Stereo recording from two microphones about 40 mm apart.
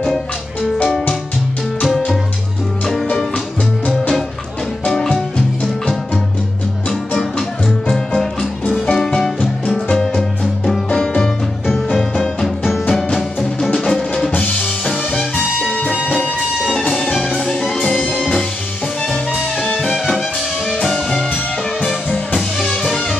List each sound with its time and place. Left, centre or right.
4.8 s music: centre
7.9 s music: centre
13.8 s music: centre
15.7 s music: left
17.8 s music: left
20.9 s music: centre
22.6 s music: centre